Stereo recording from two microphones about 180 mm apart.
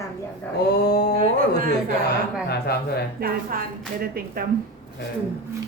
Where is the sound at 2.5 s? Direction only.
65° left (ahead or behind).